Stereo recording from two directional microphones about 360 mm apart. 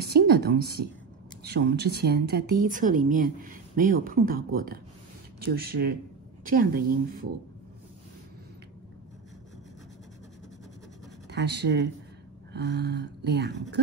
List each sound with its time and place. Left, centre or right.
0.0 s a woman's voice: right
11.2 s a woman's voice: right